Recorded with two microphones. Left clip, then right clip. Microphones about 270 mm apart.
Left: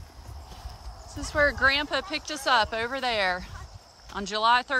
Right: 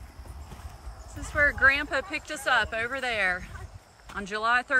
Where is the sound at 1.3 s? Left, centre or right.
Centre.